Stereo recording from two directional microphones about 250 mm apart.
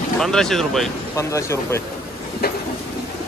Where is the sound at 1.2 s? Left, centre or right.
Centre.